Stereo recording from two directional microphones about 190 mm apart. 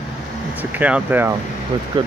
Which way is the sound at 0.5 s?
10° right (ahead or behind).